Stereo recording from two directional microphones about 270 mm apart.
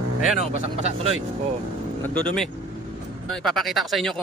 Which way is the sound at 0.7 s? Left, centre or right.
Right.